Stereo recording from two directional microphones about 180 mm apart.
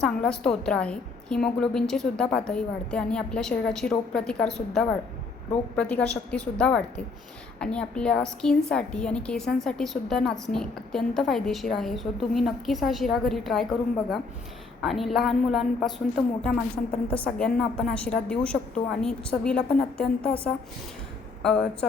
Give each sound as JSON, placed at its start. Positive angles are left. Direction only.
{"t": 0.0, "sound": "a woman's voice", "side_deg": 5}
{"t": 14.8, "sound": "a woman's voice", "side_deg": 0}